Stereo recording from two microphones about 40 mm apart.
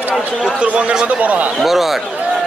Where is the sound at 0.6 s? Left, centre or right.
Right.